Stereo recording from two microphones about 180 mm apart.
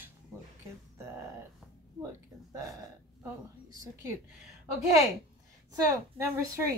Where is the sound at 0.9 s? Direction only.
15° right (ahead or behind).